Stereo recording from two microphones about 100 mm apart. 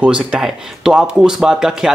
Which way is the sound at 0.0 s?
10° right (ahead or behind).